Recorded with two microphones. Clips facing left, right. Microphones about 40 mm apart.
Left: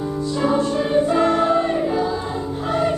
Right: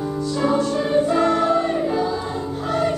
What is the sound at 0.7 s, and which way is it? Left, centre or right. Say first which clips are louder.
Music: left 1 dB; centre.